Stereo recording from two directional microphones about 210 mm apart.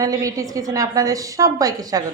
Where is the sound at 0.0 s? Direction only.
15° right (ahead or behind).